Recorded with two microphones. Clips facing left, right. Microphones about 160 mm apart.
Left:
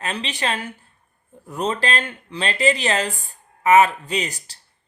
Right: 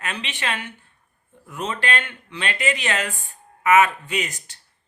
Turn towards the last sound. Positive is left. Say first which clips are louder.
# left 2 dB
turn(degrees=35)  # may be behind; listen again after turning